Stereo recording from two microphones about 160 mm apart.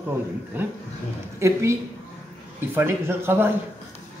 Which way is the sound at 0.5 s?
10° right (ahead or behind).